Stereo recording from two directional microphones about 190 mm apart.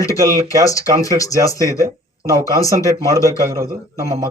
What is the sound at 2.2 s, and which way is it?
Speech, 15° right (ahead or behind).